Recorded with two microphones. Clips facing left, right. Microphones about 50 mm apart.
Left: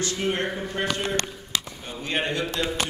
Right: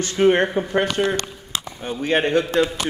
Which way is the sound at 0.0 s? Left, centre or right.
Right.